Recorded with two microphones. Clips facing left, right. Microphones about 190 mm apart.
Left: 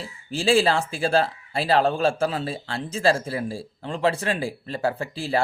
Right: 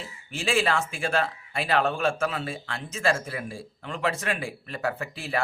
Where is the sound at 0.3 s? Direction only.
30° left (ahead or behind).